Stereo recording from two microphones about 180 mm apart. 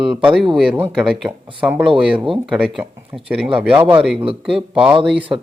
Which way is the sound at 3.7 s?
30° right (ahead or behind).